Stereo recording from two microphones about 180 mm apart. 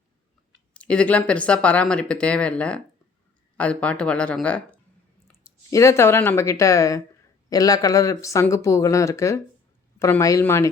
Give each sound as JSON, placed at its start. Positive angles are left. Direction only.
{"t": 0.7, "sound": "speech", "side_deg": 5}
{"t": 5.4, "sound": "speech", "side_deg": 15}